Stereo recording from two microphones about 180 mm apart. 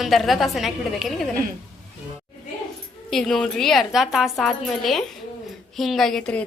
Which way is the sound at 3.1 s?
Centre (ahead or behind).